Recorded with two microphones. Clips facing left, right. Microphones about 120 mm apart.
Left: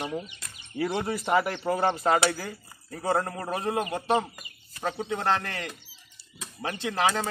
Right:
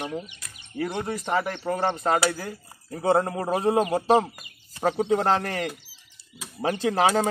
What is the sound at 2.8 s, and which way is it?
A man's voice, 25° right (ahead or behind).